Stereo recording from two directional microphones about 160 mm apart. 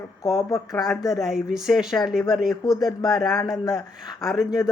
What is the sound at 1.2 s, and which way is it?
Speech, centre (ahead or behind).